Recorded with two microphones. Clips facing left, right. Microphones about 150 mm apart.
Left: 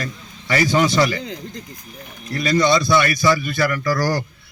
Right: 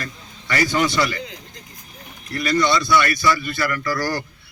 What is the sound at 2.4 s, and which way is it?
A man's voice, 20° left (ahead or behind).